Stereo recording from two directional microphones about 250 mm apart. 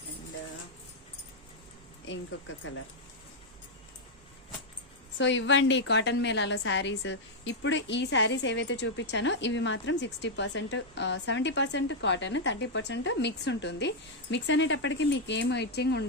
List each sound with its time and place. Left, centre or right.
2.0 s a woman's voice: left
5.1 s a woman's voice: left